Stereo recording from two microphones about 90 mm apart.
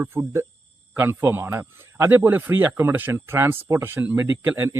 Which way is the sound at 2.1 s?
20° right (ahead or behind).